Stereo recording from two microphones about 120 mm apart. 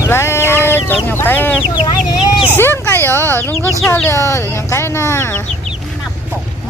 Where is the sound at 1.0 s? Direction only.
15° left (ahead or behind).